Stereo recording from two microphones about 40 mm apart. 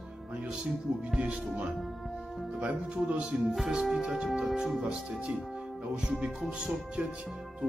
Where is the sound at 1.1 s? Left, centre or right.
Right.